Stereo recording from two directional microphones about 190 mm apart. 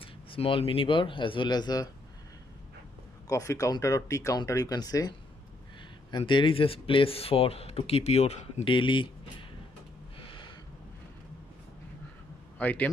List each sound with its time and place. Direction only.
0.0 s speech: 30° left (ahead or behind)
3.3 s speech: 15° left (ahead or behind)
10.1 s gasp: 25° left (ahead or behind)
12.5 s a man's voice: 10° left (ahead or behind)